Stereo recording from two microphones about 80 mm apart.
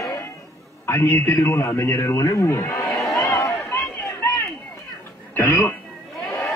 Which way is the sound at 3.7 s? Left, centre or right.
Left.